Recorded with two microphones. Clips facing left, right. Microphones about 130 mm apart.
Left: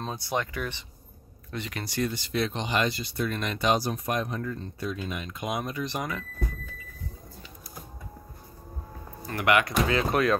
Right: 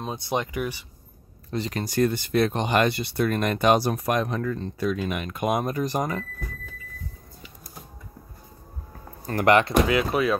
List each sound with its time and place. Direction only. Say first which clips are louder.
0.0 s speech: right 3 dB; 20° right (ahead or behind)
1.5 s speech: right 7 dB; 35° right (ahead or behind)
9.2 s speech: right 5 dB; 40° right (ahead or behind)
9.8 s speech: right 2 dB; 5° right (ahead or behind)